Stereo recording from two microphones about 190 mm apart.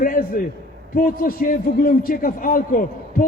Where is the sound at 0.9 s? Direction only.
50° left (ahead or behind).